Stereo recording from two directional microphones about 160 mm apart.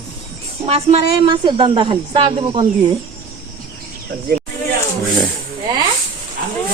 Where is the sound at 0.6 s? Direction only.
40° right (ahead or behind).